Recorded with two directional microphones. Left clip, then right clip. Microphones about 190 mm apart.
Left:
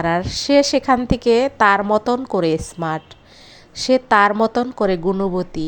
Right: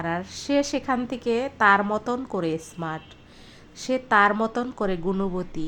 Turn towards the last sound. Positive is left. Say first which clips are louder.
# left 8 dB
turn(degrees=25)  # may be behind; listen again after turning